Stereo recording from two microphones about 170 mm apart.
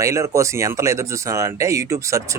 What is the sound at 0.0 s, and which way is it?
Speech, 15° right (ahead or behind).